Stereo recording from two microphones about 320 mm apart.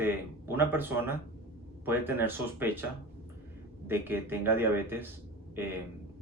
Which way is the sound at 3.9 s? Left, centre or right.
Centre.